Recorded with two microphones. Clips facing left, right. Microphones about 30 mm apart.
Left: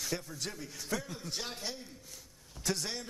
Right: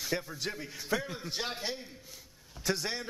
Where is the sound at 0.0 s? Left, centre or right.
Right.